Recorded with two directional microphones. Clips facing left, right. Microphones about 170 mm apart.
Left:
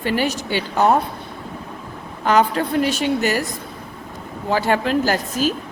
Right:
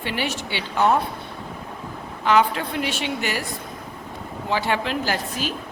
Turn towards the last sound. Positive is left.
turn(degrees=45)  # may be behind; listen again after turning